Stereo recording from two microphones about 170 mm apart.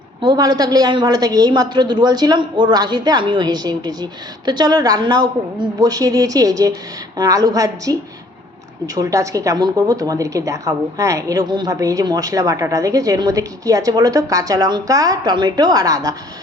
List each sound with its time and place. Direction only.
0.2 s a woman's voice: 25° right (ahead or behind)
9.0 s a woman's voice: 20° right (ahead or behind)